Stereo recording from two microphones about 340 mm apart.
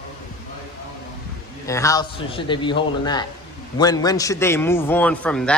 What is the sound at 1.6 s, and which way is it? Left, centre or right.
A man's voice, centre.